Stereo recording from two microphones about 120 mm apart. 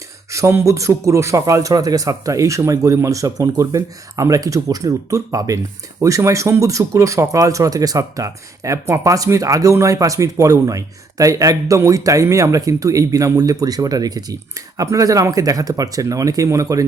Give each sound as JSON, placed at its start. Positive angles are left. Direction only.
{"t": 0.3, "sound": "speech", "side_deg": -25}